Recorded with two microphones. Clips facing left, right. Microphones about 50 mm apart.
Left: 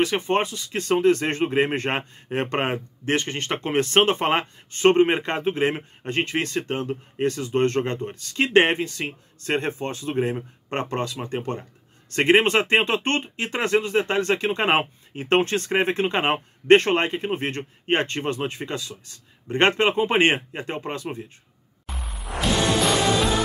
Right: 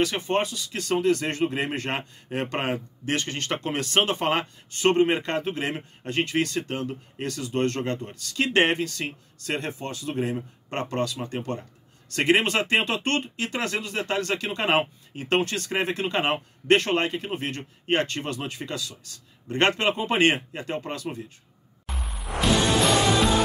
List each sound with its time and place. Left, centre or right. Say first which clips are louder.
0.0 s speech: left 2 dB; left